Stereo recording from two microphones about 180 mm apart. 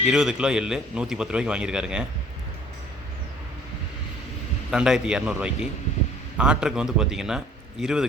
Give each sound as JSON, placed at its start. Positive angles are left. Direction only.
{"t": 0.0, "sound": "a man's voice", "side_deg": -5}
{"t": 4.7, "sound": "a man's voice", "side_deg": -5}